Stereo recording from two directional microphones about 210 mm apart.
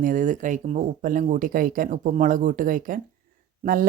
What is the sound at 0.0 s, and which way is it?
Speech, 40° right (ahead or behind).